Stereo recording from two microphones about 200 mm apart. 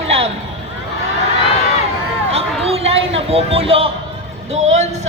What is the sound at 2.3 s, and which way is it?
A man's voice, 30° right (ahead or behind).